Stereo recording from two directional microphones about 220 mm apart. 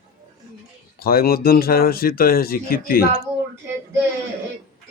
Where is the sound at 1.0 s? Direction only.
45° left (ahead or behind).